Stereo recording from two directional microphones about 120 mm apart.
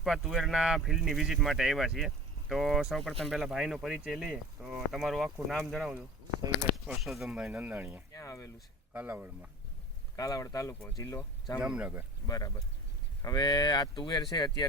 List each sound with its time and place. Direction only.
0.0 s speech: centre (ahead or behind)
8.1 s speech: 25° left (ahead or behind)
8.9 s speech: 15° right (ahead or behind)
10.2 s speech: 30° left (ahead or behind)
11.6 s speech: 10° right (ahead or behind)
12.2 s speech: 30° left (ahead or behind)